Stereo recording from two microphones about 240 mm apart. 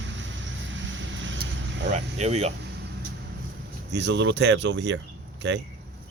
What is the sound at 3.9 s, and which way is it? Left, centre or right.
Speech, right.